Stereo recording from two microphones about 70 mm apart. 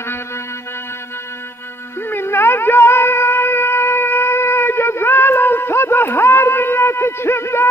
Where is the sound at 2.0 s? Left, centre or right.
Left.